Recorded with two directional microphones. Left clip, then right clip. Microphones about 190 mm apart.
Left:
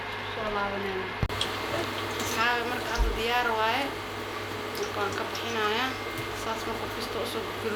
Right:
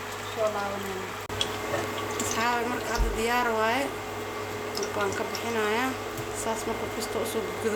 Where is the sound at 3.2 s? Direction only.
65° right (ahead or behind).